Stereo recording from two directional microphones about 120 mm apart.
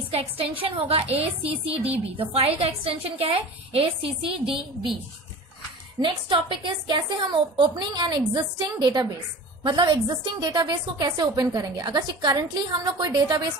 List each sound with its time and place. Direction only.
0.1 s a woman's voice: 50° right (ahead or behind)
5.9 s a woman's voice: 40° right (ahead or behind)